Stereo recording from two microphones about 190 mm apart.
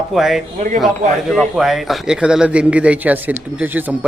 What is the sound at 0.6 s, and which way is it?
Speech, 45° right (ahead or behind).